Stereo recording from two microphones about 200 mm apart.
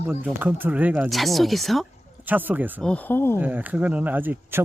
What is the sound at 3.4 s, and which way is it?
Speech, 10° right (ahead or behind).